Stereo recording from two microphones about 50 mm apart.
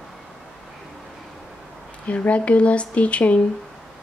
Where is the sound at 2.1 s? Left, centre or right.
Left.